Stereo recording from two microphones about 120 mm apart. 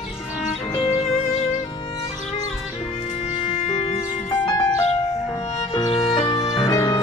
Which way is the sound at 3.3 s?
55° left (ahead or behind).